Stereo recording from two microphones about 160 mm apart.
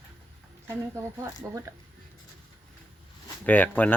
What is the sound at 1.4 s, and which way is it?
Speech, 20° right (ahead or behind).